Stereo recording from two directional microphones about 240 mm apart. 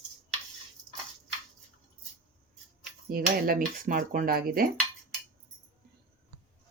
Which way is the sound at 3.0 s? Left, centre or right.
Right.